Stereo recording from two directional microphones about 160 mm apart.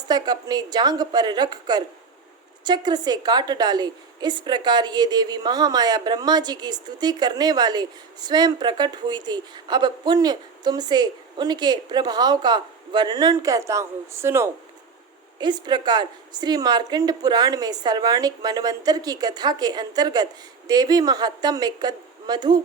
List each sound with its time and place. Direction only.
0.1 s a woman's voice: 25° right (ahead or behind)
15.4 s a woman's voice: 25° right (ahead or behind)